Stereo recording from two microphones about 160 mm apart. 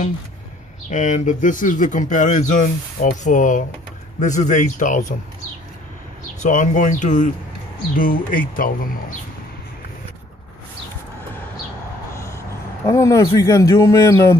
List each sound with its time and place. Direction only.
0.8 s speech: 50° left (ahead or behind)
6.4 s speech: 50° left (ahead or behind)
12.8 s speech: 20° left (ahead or behind)